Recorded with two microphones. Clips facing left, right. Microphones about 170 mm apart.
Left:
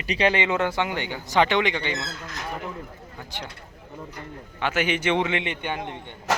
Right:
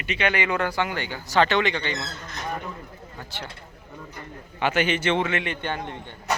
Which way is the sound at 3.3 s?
15° left (ahead or behind).